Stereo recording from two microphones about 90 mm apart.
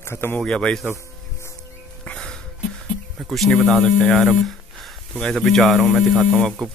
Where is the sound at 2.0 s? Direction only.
10° left (ahead or behind).